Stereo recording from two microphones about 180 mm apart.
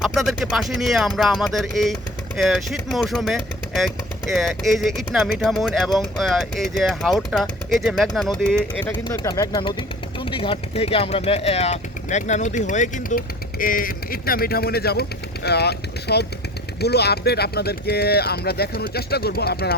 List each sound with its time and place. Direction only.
0.0 s speech: centre (ahead or behind)
9.0 s speech: 20° left (ahead or behind); by 19.7 s 60° left (ahead or behind)